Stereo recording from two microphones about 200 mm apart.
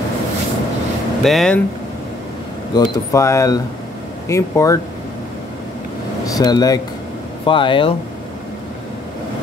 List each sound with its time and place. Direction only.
1.2 s speech: centre (ahead or behind)
2.7 s speech: 20° left (ahead or behind)
6.2 s speech: 20° left (ahead or behind)